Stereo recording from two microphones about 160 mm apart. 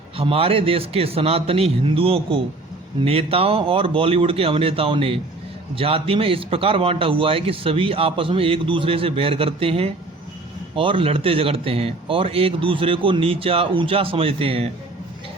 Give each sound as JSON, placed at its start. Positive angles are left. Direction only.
{"t": 0.2, "sound": "a man's voice", "side_deg": -35}